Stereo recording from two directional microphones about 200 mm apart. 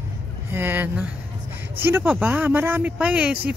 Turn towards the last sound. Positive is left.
turn(degrees=-5)  # may be behind; listen again after turning